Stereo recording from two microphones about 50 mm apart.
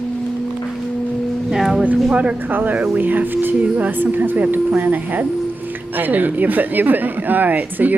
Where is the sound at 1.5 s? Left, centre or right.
Centre.